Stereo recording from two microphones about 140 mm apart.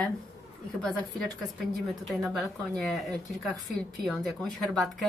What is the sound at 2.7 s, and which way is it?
Speech, 5° left (ahead or behind).